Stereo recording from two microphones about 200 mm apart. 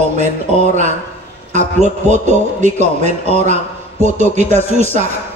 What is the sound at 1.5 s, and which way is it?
A man's voice, 35° right (ahead or behind).